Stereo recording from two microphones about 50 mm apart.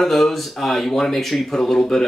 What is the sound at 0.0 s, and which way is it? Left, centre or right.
Speech, centre.